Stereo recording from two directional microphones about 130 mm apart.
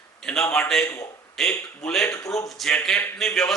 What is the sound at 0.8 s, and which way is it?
Speech, 25° left (ahead or behind).